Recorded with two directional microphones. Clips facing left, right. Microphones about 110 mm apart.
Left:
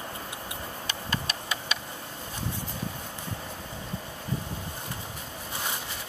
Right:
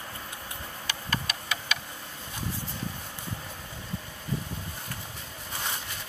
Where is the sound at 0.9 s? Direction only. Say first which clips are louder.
Right 1 dB; 25° left (ahead or behind).